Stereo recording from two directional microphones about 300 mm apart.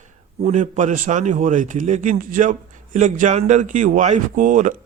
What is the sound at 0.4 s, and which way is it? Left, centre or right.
A man's voice, right.